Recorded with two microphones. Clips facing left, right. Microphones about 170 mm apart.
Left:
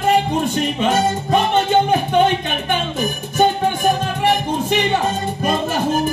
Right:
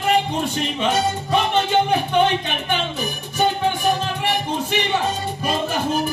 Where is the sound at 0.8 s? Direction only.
45° left (ahead or behind).